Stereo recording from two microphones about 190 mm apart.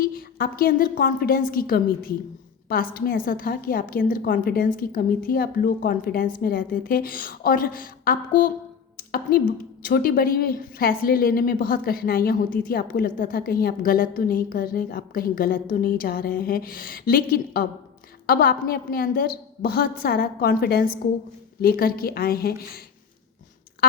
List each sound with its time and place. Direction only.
0.0 s a woman's voice: 50° left (ahead or behind)